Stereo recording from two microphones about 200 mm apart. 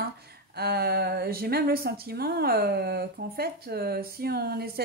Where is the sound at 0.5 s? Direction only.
50° right (ahead or behind).